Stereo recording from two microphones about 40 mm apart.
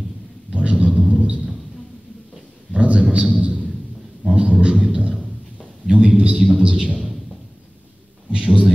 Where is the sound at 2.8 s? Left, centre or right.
Right.